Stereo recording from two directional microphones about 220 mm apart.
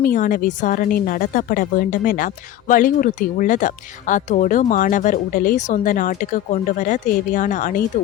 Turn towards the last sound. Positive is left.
turn(degrees=35)  # may be behind; listen again after turning